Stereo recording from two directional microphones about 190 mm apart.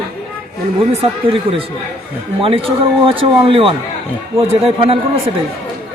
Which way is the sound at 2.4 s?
30° right (ahead or behind).